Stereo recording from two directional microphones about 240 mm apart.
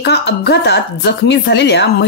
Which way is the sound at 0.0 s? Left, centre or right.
Left.